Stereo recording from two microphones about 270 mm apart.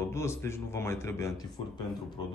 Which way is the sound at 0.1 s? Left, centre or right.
Centre.